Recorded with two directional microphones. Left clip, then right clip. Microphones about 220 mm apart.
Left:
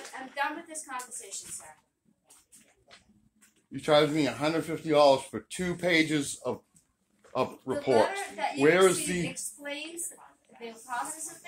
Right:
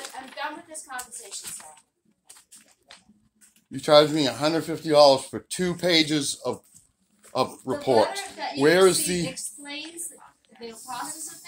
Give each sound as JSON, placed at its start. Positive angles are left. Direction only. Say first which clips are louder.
{"t": 3.7, "sound": "a child's voice", "louder": "right 6 dB", "side_deg": -30}